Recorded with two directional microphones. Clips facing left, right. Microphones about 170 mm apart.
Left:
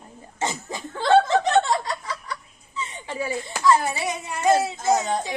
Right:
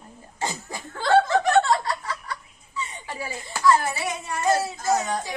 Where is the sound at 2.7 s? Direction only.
20° left (ahead or behind).